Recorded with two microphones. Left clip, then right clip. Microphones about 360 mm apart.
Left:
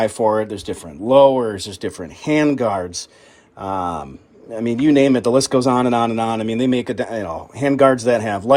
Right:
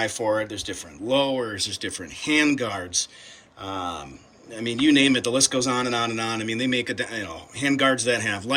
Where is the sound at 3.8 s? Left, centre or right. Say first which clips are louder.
Left 7 dB; centre.